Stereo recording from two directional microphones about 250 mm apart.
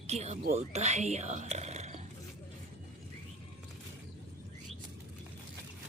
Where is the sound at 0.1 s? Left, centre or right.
Right.